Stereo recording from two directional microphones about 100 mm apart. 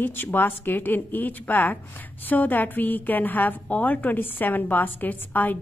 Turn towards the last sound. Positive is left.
turn(degrees=20)  # may be behind; listen again after turning